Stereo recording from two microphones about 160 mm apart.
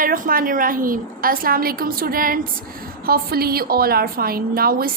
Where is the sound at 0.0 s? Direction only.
60° right (ahead or behind).